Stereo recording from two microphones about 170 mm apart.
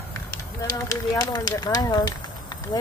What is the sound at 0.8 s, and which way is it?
Speech, 20° left (ahead or behind).